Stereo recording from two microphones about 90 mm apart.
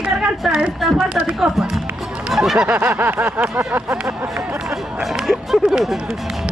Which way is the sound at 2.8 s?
20° right (ahead or behind).